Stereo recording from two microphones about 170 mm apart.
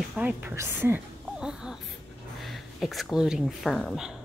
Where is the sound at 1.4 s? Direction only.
5° right (ahead or behind).